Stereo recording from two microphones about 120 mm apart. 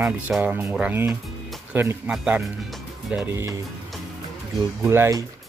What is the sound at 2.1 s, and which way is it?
Speech, 5° right (ahead or behind).